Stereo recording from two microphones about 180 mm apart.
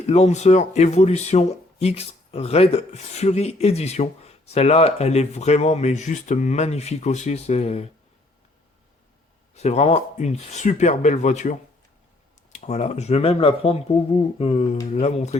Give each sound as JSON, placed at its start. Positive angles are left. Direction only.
{"t": 0.1, "sound": "speech", "side_deg": 35}
{"t": 9.6, "sound": "speech", "side_deg": 35}